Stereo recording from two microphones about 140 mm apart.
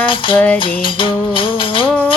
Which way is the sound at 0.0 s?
35° left (ahead or behind).